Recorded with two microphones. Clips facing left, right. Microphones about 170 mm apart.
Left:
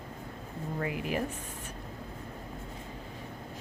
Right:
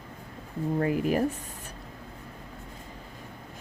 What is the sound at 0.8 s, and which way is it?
Speech, 40° right (ahead or behind).